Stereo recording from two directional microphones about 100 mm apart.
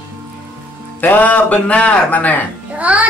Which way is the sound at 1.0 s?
15° left (ahead or behind).